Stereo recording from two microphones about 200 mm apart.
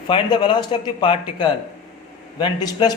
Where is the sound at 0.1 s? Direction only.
20° left (ahead or behind).